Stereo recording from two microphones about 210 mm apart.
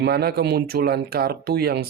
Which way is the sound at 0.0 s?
50° right (ahead or behind).